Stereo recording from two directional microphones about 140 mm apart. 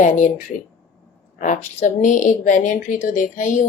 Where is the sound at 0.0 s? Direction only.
65° left (ahead or behind).